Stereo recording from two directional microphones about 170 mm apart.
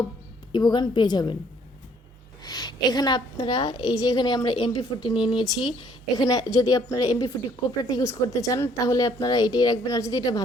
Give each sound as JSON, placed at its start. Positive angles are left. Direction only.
{"t": 0.5, "sound": "a woman's voice", "side_deg": 25}
{"t": 2.4, "sound": "a woman's voice", "side_deg": 25}